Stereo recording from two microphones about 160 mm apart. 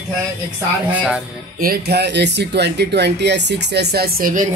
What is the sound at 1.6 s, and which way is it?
Speech, 80° right.